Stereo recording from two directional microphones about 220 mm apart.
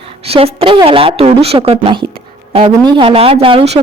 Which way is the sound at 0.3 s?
25° right (ahead or behind).